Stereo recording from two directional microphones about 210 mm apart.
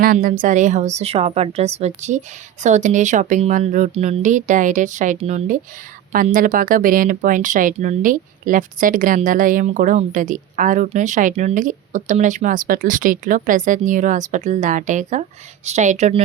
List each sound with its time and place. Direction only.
0.0 s speech: 40° right (ahead or behind)